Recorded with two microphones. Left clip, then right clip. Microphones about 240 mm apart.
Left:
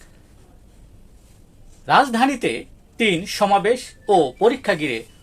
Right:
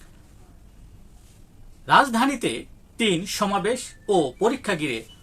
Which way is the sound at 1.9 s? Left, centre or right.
Centre.